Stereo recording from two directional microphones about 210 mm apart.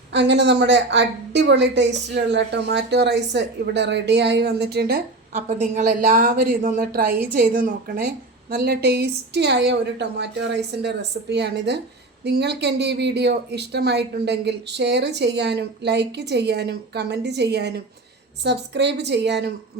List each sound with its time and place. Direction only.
0.1 s a woman's voice: 55° right (ahead or behind)
5.3 s a woman's voice: 35° right (ahead or behind); by 19.5 s 55° right (ahead or behind)